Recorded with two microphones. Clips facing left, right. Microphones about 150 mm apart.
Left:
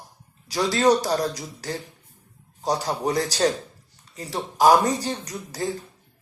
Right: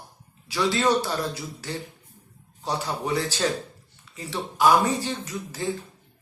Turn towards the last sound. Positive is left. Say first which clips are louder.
# left 1 dB
turn(degrees=40)  # may be behind; listen again after turning